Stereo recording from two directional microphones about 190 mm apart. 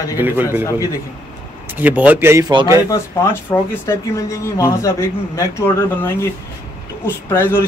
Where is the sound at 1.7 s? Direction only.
10° right (ahead or behind).